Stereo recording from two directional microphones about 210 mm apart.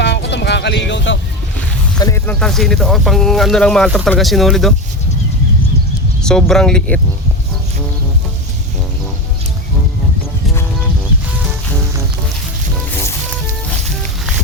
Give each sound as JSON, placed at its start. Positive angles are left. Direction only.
{"t": 0.0, "sound": "a sound", "side_deg": 55}
{"t": 2.0, "sound": "speech", "side_deg": 15}
{"t": 6.2, "sound": "speech", "side_deg": 5}